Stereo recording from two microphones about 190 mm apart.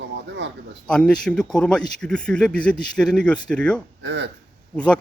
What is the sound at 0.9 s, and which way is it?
Speech, 5° left (ahead or behind).